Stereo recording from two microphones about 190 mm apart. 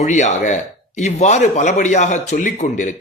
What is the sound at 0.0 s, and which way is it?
A man's voice, 40° left (ahead or behind).